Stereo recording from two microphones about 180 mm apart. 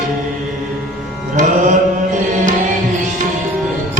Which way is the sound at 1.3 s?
45° right (ahead or behind).